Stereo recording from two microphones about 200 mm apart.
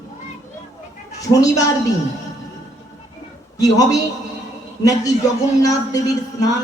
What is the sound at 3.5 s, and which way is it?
Speech, 15° left (ahead or behind).